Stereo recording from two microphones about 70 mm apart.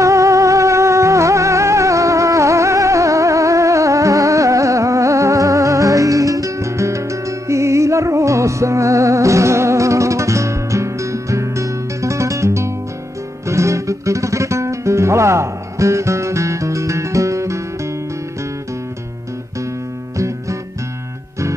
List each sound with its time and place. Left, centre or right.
0.0 s music: right
20.2 s guitar: right